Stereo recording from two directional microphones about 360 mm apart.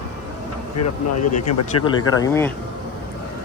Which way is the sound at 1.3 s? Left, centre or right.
Left.